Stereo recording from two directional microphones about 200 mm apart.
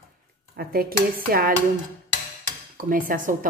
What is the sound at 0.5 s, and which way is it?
A woman's voice, 50° right (ahead or behind).